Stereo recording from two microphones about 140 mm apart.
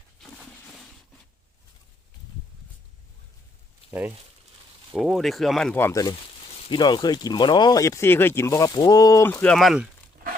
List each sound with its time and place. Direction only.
0.2 s a sound: 5° left (ahead or behind)
4.9 s speech: centre (ahead or behind)
5.7 s speech: 20° left (ahead or behind)
6.7 s speech: 35° left (ahead or behind)
9.2 s speech: 10° left (ahead or behind)